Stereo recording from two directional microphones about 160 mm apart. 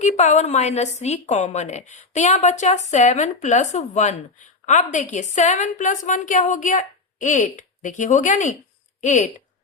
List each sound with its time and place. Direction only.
0.0 s speech: 45° left (ahead or behind)